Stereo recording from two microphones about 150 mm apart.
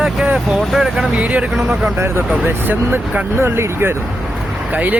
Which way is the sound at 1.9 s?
15° right (ahead or behind).